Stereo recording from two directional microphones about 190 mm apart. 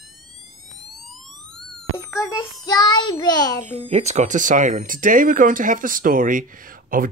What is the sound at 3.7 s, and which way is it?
Speech, 35° right (ahead or behind).